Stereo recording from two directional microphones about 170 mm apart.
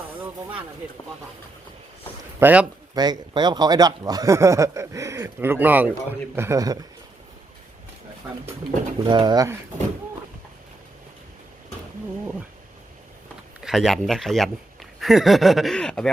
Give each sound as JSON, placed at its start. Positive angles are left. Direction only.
{"t": 0.2, "sound": "a sound", "side_deg": -15}
{"t": 2.4, "sound": "a man's voice", "side_deg": -10}
{"t": 2.9, "sound": "a man's voice", "side_deg": -25}
{"t": 9.0, "sound": "speech", "side_deg": -25}
{"t": 13.6, "sound": "speech", "side_deg": 0}